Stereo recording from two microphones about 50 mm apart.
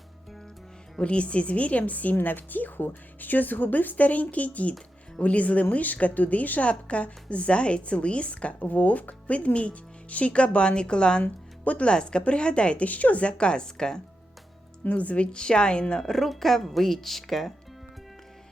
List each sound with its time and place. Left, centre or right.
0.9 s a woman's voice: left
11.2 s speech: left
11.9 s a woman's voice: centre
14.8 s speech: left; by 17.5 s centre